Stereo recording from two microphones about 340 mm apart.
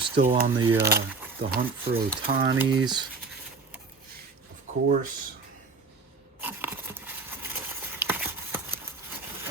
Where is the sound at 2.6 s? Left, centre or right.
Centre.